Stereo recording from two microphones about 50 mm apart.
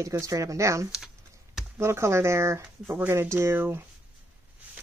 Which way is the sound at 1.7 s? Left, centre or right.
Right.